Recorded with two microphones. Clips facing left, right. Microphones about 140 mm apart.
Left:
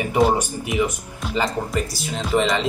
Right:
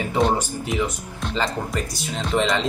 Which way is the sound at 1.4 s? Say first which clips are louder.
Left 3 dB; centre (ahead or behind).